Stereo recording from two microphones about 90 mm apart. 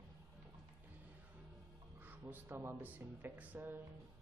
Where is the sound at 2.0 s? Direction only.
20° right (ahead or behind).